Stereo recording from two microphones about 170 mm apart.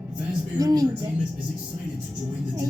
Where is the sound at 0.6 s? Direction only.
20° right (ahead or behind).